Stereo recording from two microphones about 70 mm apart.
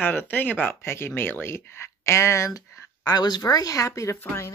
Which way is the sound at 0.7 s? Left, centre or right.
Left.